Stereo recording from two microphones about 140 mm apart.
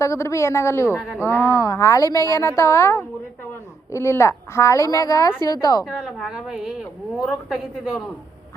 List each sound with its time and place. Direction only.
0.0 s speech: 20° left (ahead or behind)
5.8 s a woman's voice: centre (ahead or behind)